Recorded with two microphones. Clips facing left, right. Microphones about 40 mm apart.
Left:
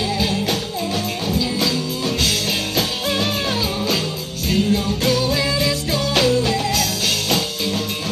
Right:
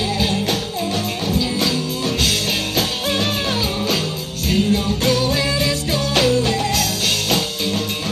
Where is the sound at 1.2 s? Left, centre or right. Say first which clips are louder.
Right 1 dB; centre.